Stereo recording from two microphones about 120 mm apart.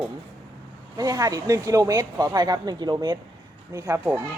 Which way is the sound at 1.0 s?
30° right (ahead or behind).